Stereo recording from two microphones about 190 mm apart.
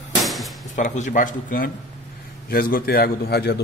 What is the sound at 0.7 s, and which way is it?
A man's voice, 40° left (ahead or behind).